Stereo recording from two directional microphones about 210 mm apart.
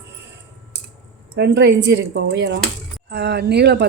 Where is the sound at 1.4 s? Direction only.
55° right (ahead or behind).